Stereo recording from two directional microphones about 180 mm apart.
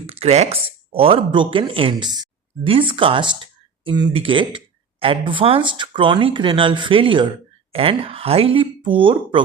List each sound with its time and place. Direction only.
0.1 s speech: 35° right (ahead or behind)